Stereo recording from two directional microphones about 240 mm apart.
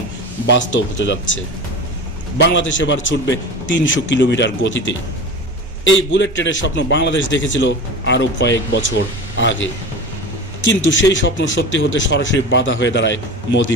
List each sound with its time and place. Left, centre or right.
0.5 s a man's voice: left
5.9 s a man's voice: left